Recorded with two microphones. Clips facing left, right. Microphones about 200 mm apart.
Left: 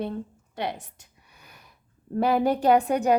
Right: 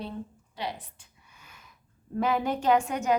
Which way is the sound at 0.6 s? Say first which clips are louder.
Left 4 dB; 50° left (ahead or behind).